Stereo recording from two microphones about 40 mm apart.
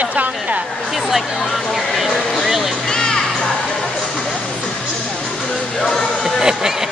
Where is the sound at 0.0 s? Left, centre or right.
Right.